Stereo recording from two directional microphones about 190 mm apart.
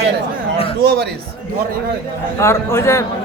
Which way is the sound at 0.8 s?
55° right (ahead or behind).